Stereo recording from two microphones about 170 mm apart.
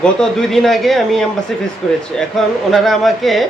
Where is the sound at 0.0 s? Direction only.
5° left (ahead or behind).